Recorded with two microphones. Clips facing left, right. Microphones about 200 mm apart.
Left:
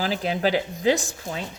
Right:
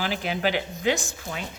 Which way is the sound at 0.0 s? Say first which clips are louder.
Left 3 dB; 35° left (ahead or behind).